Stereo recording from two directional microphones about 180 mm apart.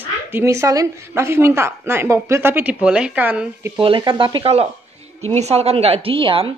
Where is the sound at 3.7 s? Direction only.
30° right (ahead or behind).